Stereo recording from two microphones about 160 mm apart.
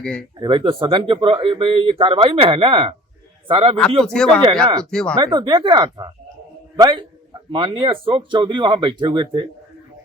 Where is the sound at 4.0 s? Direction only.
5° left (ahead or behind).